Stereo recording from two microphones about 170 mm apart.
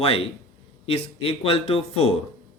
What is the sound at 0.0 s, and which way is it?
A man's voice, 35° left (ahead or behind).